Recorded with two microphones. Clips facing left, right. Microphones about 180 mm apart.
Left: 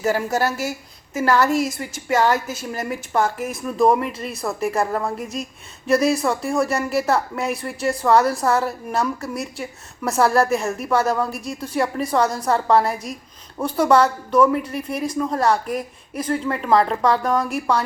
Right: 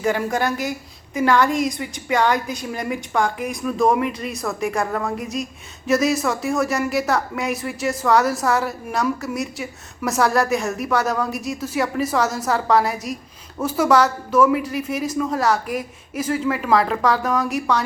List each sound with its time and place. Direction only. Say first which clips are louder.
0.0 s speech: even; 5° left (ahead or behind)